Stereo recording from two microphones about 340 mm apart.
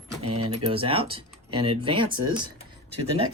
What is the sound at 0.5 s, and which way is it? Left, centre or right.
Speech, centre.